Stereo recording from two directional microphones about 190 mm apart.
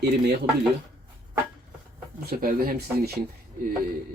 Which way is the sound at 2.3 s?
50° right (ahead or behind).